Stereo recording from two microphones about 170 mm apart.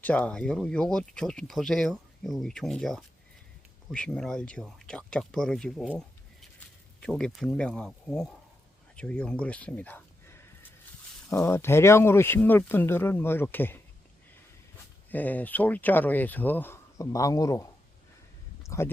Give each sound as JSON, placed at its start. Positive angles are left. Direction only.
{"t": 0.0, "sound": "speech", "side_deg": 5}
{"t": 7.0, "sound": "speech", "side_deg": 5}
{"t": 9.0, "sound": "a sound", "side_deg": 5}
{"t": 11.4, "sound": "speech", "side_deg": 15}
{"t": 15.1, "sound": "speech", "side_deg": 10}
{"t": 18.6, "sound": "a sound", "side_deg": 15}